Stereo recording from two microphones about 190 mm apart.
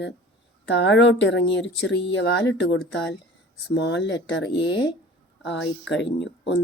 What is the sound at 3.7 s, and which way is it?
Speech, 65° left (ahead or behind).